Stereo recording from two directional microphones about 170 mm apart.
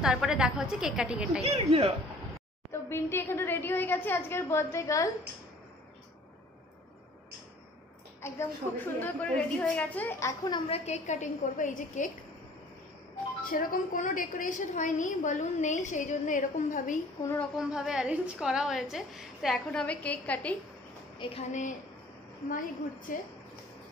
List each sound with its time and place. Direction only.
0.0 s a woman's voice: 5° right (ahead or behind)
1.4 s speech: 35° right (ahead or behind)
2.7 s a woman's voice: 15° left (ahead or behind)
8.2 s a woman's voice: 15° left (ahead or behind)
10.5 s a woman's voice: 40° left (ahead or behind)
13.5 s a woman's voice: 55° left (ahead or behind)
17.4 s a woman's voice: 5° right (ahead or behind)
21.2 s a woman's voice: 35° left (ahead or behind)
23.1 s a woman's voice: 55° left (ahead or behind)